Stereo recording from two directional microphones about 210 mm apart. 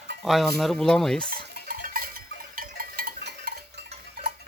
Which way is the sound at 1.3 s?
45° right (ahead or behind).